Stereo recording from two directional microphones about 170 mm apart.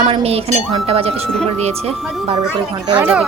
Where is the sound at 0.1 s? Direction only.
35° right (ahead or behind).